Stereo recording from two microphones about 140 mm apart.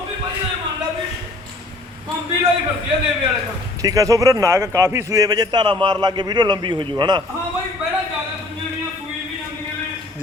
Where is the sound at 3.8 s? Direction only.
25° right (ahead or behind).